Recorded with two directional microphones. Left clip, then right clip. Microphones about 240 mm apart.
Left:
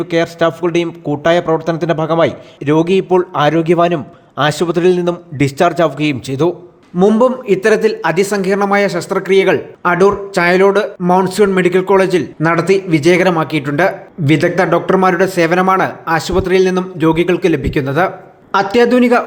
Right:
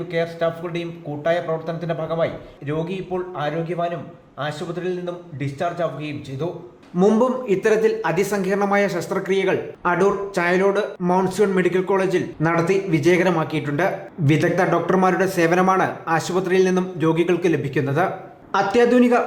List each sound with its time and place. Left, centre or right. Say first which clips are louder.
0.1 s a man's voice: left 8 dB; left
6.9 s a man's voice: left 7 dB; centre